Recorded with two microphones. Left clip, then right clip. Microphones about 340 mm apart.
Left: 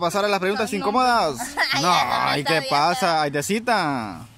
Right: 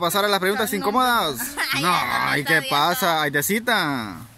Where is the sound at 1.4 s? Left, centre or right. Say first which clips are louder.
Left 2 dB; centre.